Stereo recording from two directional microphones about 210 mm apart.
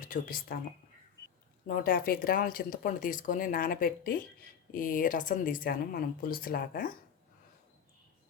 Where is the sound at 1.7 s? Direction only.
45° left (ahead or behind).